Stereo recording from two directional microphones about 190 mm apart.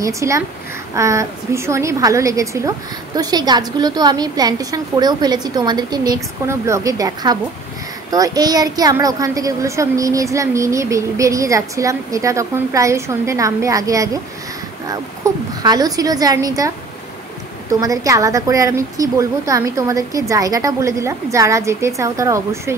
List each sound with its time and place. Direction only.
0.0 s a woman's voice: 15° right (ahead or behind)